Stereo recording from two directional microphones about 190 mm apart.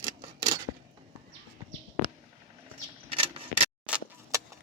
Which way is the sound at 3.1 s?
30° right (ahead or behind).